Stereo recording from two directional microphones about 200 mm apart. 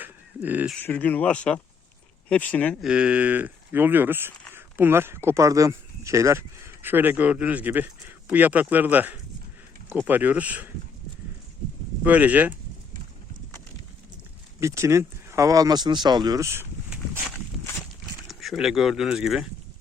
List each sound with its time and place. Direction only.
0.0 s a sound: 10° right (ahead or behind)
0.8 s speech: 10° left (ahead or behind)
2.9 s speech: 5° right (ahead or behind)
12.0 s speech: 10° right (ahead or behind)
14.6 s speech: 15° right (ahead or behind)
18.3 s speech: centre (ahead or behind)